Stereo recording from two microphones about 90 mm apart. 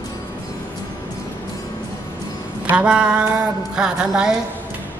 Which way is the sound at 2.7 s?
10° right (ahead or behind).